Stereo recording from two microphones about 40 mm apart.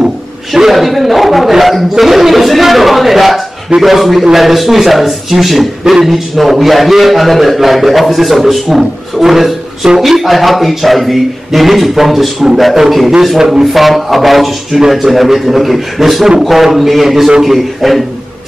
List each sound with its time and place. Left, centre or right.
0.6 s a man's voice: centre